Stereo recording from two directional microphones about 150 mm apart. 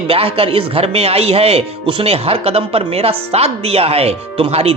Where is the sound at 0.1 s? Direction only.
40° right (ahead or behind).